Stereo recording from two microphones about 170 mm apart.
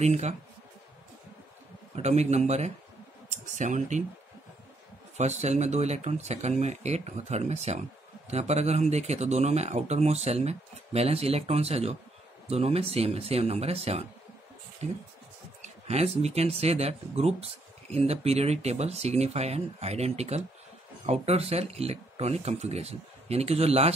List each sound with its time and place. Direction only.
0.0 s speech: 40° right (ahead or behind)
2.0 s speech: 40° right (ahead or behind)
5.1 s speech: 40° right (ahead or behind)
15.9 s speech: 40° right (ahead or behind)